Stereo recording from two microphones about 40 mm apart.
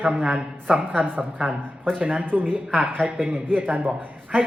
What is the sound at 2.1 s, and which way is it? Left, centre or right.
A man's voice, right.